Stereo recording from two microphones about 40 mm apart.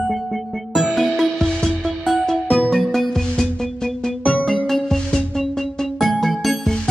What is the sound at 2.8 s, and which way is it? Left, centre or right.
Music, centre.